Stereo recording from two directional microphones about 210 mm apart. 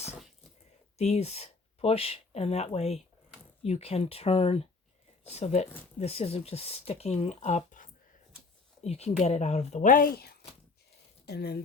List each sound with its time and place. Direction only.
0.9 s speech: 30° left (ahead or behind); by 11.6 s 50° left (ahead or behind)